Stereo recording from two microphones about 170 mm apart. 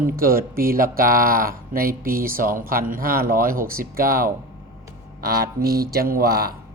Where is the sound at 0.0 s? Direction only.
60° right (ahead or behind).